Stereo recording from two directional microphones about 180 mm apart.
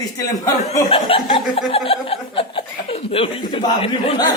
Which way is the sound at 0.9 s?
30° left (ahead or behind).